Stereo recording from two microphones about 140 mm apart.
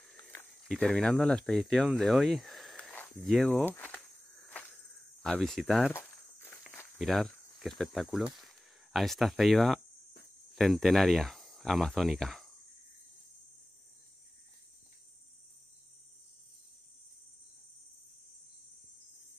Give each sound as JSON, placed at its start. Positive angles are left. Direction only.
{"t": 0.2, "sound": "cricket", "side_deg": 15}
{"t": 0.5, "sound": "speech", "side_deg": 0}
{"t": 3.3, "sound": "walk", "side_deg": 5}
{"t": 5.2, "sound": "speech", "side_deg": 5}
{"t": 5.9, "sound": "walk", "side_deg": 15}
{"t": 7.0, "sound": "speech", "side_deg": 0}